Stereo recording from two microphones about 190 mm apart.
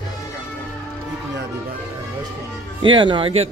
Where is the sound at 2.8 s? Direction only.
25° right (ahead or behind).